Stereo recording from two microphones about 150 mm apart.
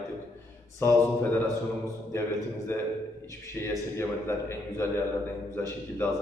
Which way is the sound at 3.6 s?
15° left (ahead or behind).